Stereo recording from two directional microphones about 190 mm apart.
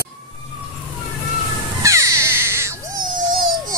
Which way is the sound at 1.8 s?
15° right (ahead or behind).